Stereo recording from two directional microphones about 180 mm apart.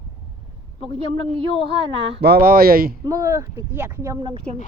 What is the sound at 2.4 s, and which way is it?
Speech, 55° right (ahead or behind).